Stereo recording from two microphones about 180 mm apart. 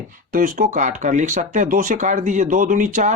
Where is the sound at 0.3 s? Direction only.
45° right (ahead or behind).